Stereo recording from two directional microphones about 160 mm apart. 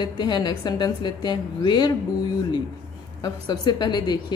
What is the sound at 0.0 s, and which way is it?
A woman's voice, 25° left (ahead or behind).